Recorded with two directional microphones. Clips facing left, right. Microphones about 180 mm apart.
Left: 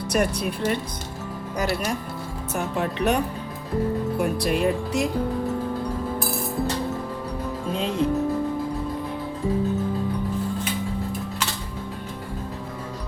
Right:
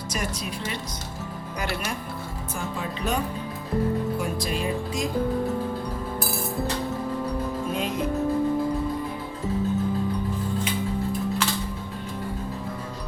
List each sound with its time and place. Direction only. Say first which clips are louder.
0.1 s speech: left 8 dB; 60° left (ahead or behind)
1.5 s speech: left 5 dB; 40° left (ahead or behind)
2.6 s speech: left 6 dB; 65° left (ahead or behind)
4.2 s speech: left 5 dB; 60° left (ahead or behind)
7.7 s speech: left 6 dB; 30° left (ahead or behind)